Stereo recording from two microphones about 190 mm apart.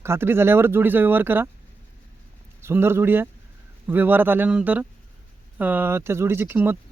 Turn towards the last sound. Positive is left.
turn(degrees=-10)  # may be behind; listen again after turning